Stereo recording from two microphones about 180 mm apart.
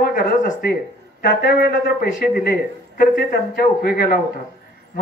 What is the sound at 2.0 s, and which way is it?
Speech, 55° left (ahead or behind).